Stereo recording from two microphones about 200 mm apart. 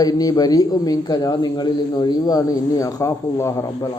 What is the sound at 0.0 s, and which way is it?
Speech, 20° left (ahead or behind).